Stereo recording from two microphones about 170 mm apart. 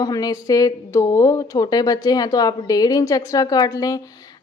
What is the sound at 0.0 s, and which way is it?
Speech, 20° left (ahead or behind).